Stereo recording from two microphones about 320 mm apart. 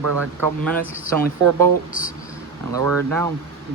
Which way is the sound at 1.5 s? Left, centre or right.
Right.